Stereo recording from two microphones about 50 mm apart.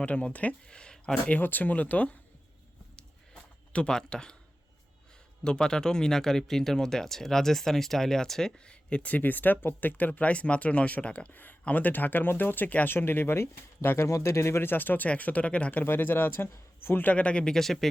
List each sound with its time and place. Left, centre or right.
0.0 s speech: left
0.7 s a sound: centre
1.3 s speech: left
3.7 s speech: centre
5.4 s speech: centre
11.3 s speech: left
14.1 s speech: left
14.7 s speech: left
15.8 s speech: left
17.0 s speech: left
17.5 s speech: centre